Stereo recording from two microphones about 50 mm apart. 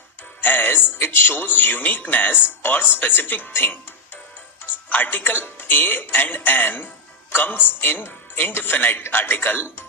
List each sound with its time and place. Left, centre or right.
0.4 s speech: left